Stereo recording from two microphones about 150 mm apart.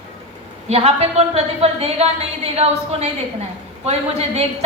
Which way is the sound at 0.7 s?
45° right (ahead or behind).